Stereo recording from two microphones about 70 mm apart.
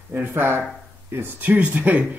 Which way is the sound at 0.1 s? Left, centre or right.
Right.